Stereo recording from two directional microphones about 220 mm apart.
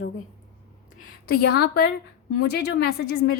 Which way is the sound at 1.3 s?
45° left (ahead or behind).